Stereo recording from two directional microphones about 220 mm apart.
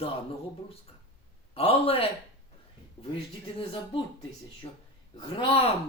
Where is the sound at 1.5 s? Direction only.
25° left (ahead or behind).